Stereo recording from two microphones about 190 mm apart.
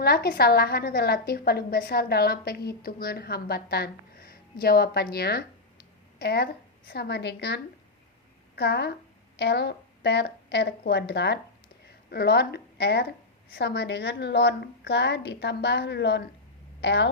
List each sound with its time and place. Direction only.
0.0 s a woman's voice: 55° left (ahead or behind)